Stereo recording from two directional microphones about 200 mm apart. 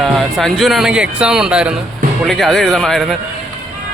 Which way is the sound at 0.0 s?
Centre (ahead or behind).